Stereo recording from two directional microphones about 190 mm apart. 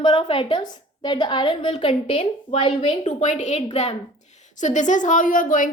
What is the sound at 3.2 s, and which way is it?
A woman's voice, 40° left (ahead or behind).